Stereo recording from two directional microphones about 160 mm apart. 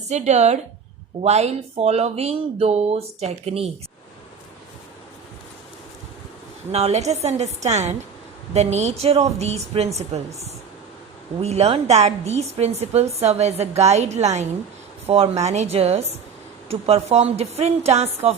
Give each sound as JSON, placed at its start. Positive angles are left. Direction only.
{"t": 0.1, "sound": "a woman's voice", "side_deg": -45}
{"t": 6.7, "sound": "a woman's voice", "side_deg": -40}